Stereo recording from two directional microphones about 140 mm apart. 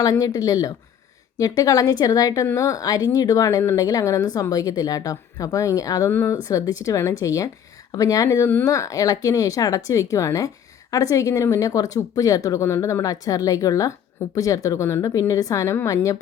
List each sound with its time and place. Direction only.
0.0 s speech: 25° left (ahead or behind)